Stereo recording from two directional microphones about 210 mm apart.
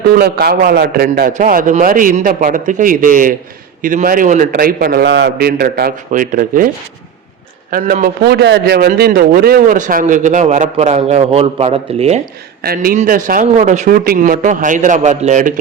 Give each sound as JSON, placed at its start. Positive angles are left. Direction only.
{"t": 0.1, "sound": "a man's voice", "side_deg": -45}
{"t": 7.7, "sound": "a man's voice", "side_deg": -40}
{"t": 12.6, "sound": "a man's voice", "side_deg": -45}